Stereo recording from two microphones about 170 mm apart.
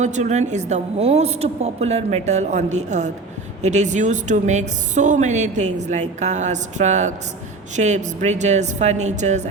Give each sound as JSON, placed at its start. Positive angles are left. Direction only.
{"t": 0.0, "sound": "a woman's voice", "side_deg": -45}